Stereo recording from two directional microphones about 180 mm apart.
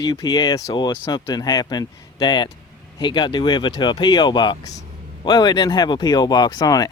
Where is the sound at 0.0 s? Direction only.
20° left (ahead or behind).